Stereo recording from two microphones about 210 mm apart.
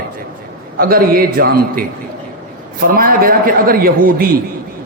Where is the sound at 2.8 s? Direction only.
45° right (ahead or behind).